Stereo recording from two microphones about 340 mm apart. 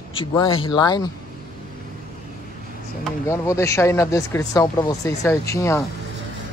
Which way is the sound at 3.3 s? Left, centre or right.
Centre.